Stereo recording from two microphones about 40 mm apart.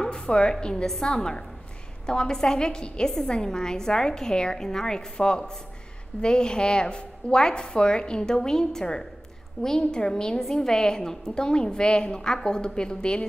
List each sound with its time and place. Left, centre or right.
0.0 s a woman's voice: left
0.8 s a woman's voice: centre